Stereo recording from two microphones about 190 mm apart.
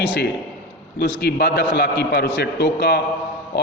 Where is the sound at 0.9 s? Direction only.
60° left (ahead or behind).